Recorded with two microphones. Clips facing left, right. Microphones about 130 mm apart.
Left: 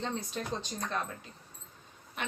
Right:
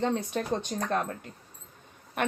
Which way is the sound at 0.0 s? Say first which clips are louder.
Right 7 dB; 65° right (ahead or behind).